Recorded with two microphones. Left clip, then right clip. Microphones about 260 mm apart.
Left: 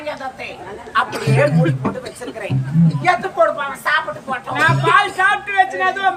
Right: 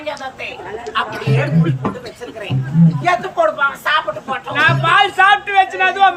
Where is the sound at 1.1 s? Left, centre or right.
Left.